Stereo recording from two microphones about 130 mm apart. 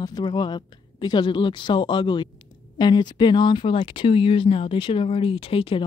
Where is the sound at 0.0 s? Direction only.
35° left (ahead or behind).